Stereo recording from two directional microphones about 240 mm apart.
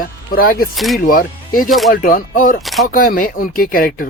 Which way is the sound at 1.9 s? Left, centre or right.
Left.